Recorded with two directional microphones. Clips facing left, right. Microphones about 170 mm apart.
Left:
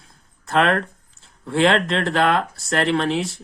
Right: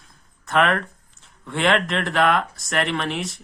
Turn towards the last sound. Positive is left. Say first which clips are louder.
# left 4 dB
turn(degrees=35)  # may be behind; listen again after turning